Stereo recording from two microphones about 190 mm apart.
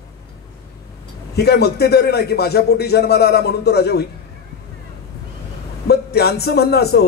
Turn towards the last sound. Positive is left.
turn(degrees=55)  # may be behind; listen again after turning